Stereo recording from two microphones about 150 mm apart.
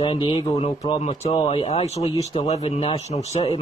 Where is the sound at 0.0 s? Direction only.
35° left (ahead or behind).